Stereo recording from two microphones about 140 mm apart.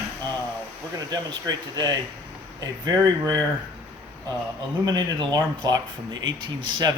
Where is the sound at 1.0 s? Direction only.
30° right (ahead or behind).